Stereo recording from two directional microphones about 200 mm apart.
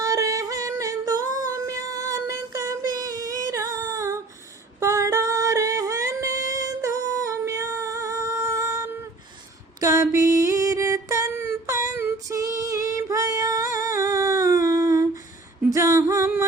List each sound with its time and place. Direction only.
0.0 s singing: 15° right (ahead or behind)
9.8 s a sound: 15° right (ahead or behind)
11.9 s female singing: 15° right (ahead or behind)
13.7 s a sound: 15° right (ahead or behind)
14.7 s humming: 15° right (ahead or behind)
15.6 s female singing: 15° right (ahead or behind)